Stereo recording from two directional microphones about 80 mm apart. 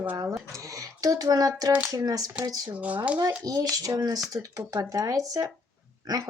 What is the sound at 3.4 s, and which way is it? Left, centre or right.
Speech, right.